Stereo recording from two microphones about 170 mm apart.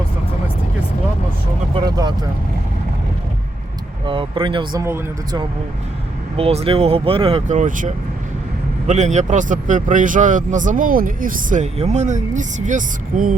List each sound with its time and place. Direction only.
1.7 s vehicle: 25° right (ahead or behind)
4.0 s speech: 30° right (ahead or behind)
6.3 s speech: 35° right (ahead or behind); by 13.3 s 50° right (ahead or behind)